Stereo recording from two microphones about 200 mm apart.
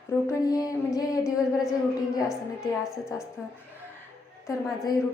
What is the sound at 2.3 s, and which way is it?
Speech, centre (ahead or behind).